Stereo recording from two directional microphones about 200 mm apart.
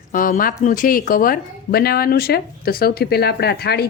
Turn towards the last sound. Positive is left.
turn(degrees=50)  # may be behind; listen again after turning